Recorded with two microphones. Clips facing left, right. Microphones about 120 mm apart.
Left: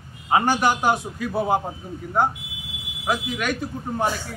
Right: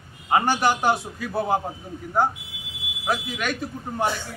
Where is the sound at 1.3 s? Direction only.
20° left (ahead or behind).